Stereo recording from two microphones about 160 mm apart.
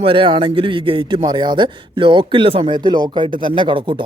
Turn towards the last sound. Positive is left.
turn(degrees=-30)  # may be behind; listen again after turning